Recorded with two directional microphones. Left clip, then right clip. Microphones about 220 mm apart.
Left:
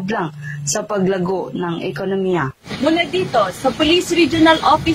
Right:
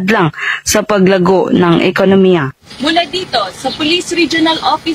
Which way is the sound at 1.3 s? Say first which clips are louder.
Right 12 dB; 50° right (ahead or behind).